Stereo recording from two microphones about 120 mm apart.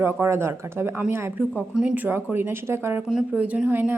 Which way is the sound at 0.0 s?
20° right (ahead or behind).